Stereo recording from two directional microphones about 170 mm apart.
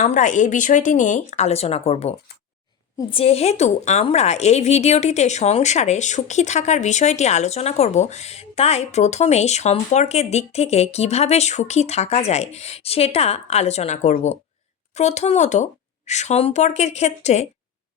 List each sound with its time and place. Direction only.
0.0 s a woman's voice: 45° left (ahead or behind)